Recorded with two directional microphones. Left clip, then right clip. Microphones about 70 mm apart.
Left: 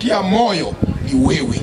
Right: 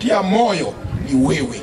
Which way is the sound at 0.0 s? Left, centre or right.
Left.